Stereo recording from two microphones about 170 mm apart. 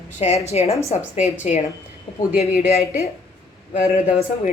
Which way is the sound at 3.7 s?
45° left (ahead or behind).